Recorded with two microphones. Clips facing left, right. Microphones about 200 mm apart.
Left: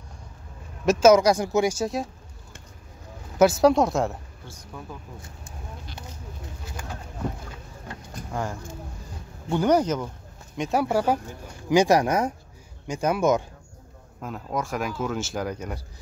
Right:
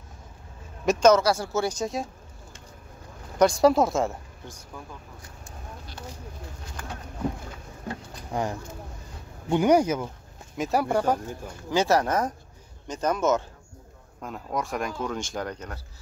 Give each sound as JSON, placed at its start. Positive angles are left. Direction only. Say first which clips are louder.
{"t": 0.8, "sound": "speech", "louder": "left 3 dB", "side_deg": 5}
{"t": 3.3, "sound": "speech", "louder": "left 1 dB", "side_deg": 5}
{"t": 8.3, "sound": "speech", "louder": "right 2 dB", "side_deg": -15}
{"t": 10.6, "sound": "speech", "louder": "left 1 dB", "side_deg": 0}
{"t": 11.7, "sound": "speech", "louder": "left 4 dB", "side_deg": 15}
{"t": 14.2, "sound": "speech", "louder": "left 1 dB", "side_deg": 0}